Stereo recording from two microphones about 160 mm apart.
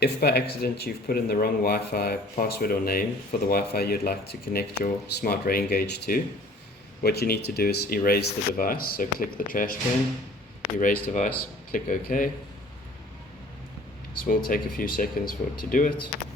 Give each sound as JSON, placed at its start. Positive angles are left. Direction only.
{"t": 0.0, "sound": "speech", "side_deg": 85}
{"t": 0.6, "sound": "speech", "side_deg": 70}
{"t": 10.8, "sound": "speech", "side_deg": 60}
{"t": 14.3, "sound": "speech", "side_deg": 60}